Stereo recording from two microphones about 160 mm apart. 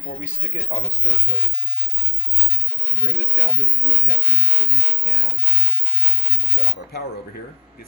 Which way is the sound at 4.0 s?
70° left (ahead or behind).